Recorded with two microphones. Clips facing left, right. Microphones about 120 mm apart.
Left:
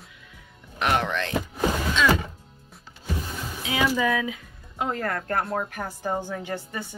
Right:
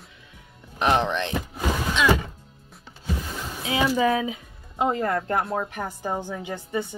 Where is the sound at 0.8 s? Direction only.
25° right (ahead or behind).